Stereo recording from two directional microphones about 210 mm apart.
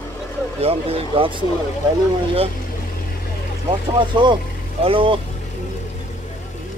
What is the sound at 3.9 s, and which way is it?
Speech, 20° right (ahead or behind).